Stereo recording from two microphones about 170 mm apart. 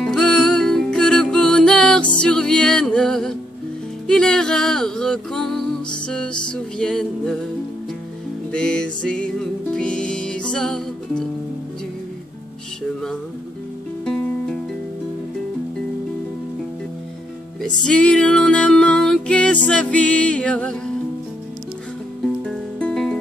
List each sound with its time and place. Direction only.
0.0 s music: centre (ahead or behind)
8.5 s music: 5° left (ahead or behind)
14.0 s music: 5° left (ahead or behind)
17.6 s music: 5° left (ahead or behind)
22.2 s music: 5° left (ahead or behind)